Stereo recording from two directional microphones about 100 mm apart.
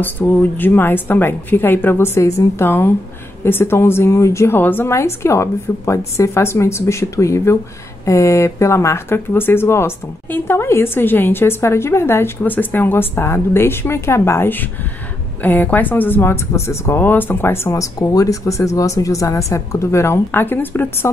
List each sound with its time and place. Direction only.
0.0 s speech: 20° left (ahead or behind)
17.6 s speech: 35° left (ahead or behind)